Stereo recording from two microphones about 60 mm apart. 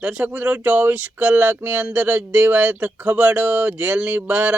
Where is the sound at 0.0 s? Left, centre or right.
Centre.